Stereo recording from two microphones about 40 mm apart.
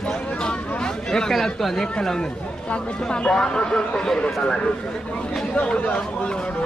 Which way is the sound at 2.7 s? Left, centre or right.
Left.